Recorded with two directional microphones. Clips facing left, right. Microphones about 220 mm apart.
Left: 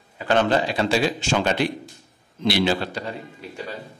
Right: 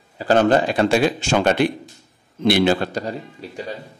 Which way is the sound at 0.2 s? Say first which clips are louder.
Right 4 dB; 40° right (ahead or behind).